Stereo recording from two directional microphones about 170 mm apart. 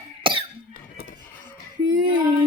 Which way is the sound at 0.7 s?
55° left (ahead or behind).